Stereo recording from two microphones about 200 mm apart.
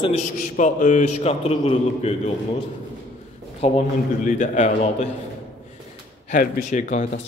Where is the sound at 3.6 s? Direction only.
30° left (ahead or behind).